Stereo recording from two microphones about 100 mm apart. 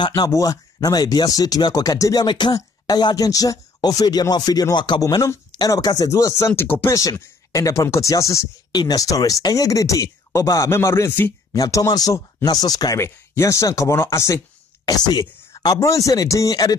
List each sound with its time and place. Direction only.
0.0 s speech: 50° left (ahead or behind)
0.3 s speech: 35° left (ahead or behind)
2.2 s speech: 50° left (ahead or behind)
5.0 s speech: 35° left (ahead or behind)
7.0 s speech: 35° left (ahead or behind)
11.5 s speech: 35° left (ahead or behind)
14.9 s speech: 40° left (ahead or behind)